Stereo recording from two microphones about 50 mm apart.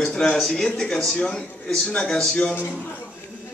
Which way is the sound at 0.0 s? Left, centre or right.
Centre.